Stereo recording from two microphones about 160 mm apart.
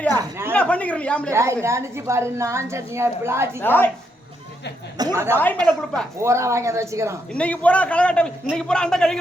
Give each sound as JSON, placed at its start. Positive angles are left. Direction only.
{"t": 0.1, "sound": "a sound", "side_deg": -20}
{"t": 0.5, "sound": "speech", "side_deg": 10}
{"t": 1.3, "sound": "a woman's voice", "side_deg": -15}
{"t": 3.6, "sound": "a man's voice", "side_deg": 15}
{"t": 4.9, "sound": "a woman's voice", "side_deg": -15}
{"t": 5.4, "sound": "a man's voice", "side_deg": 10}
{"t": 6.1, "sound": "a woman's voice", "side_deg": -15}
{"t": 7.3, "sound": "a man's voice", "side_deg": 10}